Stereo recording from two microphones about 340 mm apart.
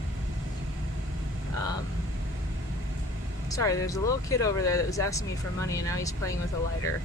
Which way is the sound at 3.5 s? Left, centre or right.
Centre.